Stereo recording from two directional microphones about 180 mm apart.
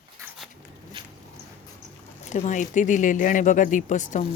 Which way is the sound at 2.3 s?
40° left (ahead or behind).